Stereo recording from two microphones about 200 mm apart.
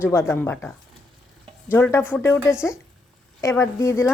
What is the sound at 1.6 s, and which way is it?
Speech, 10° left (ahead or behind).